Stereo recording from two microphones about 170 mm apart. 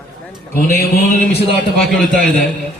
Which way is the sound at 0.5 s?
65° left (ahead or behind).